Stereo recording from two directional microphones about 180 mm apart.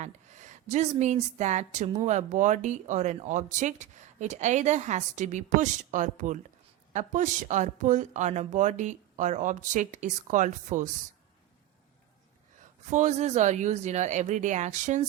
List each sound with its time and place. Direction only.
0.0 s speech: 40° right (ahead or behind)
12.9 s speech: 40° right (ahead or behind)